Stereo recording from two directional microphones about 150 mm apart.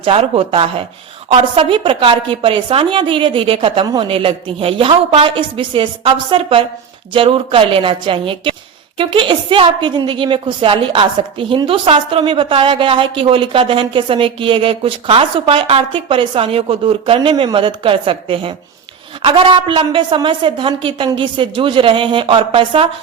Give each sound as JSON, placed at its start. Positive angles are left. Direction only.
{"t": 0.0, "sound": "a woman's voice", "side_deg": -40}